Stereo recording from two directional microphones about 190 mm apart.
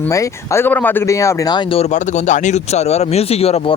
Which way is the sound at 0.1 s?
15° left (ahead or behind).